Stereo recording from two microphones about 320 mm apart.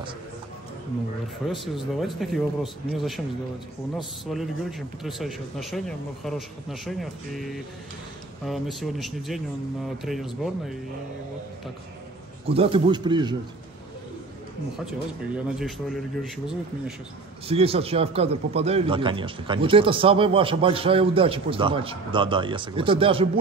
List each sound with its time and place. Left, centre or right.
2.0 s speech: centre
4.3 s speech: centre
12.4 s speech: centre
15.3 s speech: centre
17.5 s speech: centre